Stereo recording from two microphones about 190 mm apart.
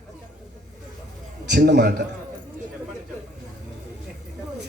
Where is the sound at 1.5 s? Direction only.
60° right (ahead or behind).